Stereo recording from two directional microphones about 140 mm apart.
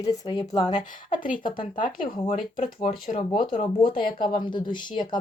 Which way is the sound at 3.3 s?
70° left (ahead or behind).